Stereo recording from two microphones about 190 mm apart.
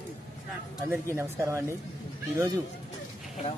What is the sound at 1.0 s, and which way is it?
Speech, 15° right (ahead or behind).